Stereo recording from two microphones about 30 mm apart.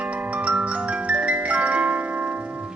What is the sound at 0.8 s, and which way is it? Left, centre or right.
Music, right.